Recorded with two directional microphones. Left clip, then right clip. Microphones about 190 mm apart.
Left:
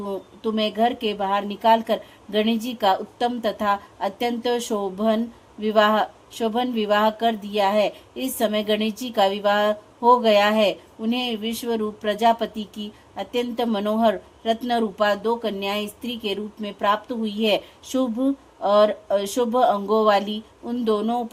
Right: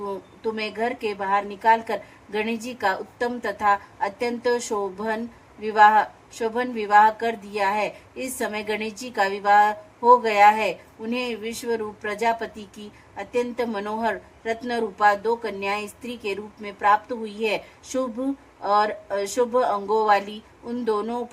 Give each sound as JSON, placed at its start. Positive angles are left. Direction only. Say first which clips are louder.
{"t": 0.4, "sound": "speech", "louder": "left 5 dB", "side_deg": 45}